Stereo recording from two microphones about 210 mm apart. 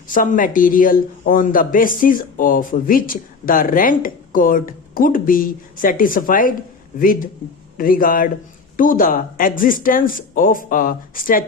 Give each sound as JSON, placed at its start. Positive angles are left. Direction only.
{"t": 0.1, "sound": "a man's voice", "side_deg": 40}